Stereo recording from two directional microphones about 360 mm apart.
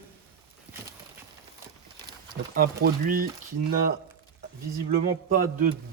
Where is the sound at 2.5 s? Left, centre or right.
Right.